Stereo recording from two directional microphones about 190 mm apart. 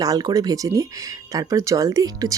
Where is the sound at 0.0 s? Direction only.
20° right (ahead or behind).